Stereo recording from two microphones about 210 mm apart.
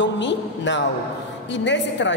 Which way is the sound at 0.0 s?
60° left (ahead or behind).